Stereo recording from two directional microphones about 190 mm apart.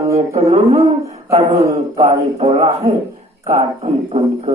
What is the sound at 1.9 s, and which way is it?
Speech, 35° right (ahead or behind).